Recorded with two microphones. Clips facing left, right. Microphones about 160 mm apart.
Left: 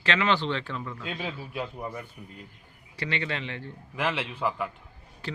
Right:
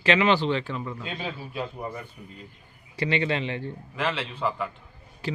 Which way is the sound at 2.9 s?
20° right (ahead or behind).